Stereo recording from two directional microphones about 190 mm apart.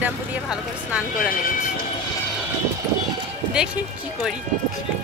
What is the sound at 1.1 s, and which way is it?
Speech, 45° left (ahead or behind).